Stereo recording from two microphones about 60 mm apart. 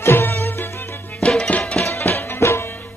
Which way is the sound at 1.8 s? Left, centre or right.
Left.